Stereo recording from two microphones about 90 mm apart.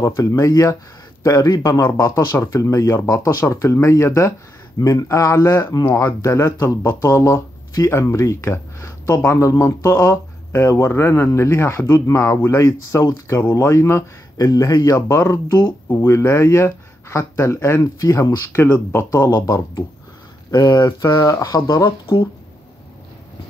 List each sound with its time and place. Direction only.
0.0 s speech: 35° left (ahead or behind)
18.5 s speech: 25° left (ahead or behind)
19.3 s speech: 40° left (ahead or behind)